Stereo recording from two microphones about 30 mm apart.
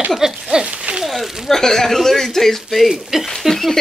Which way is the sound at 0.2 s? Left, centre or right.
Right.